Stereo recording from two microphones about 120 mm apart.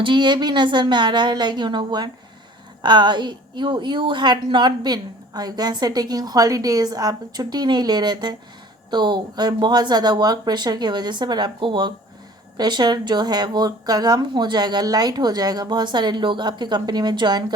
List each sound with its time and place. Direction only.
0.0 s a woman's voice: 40° right (ahead or behind)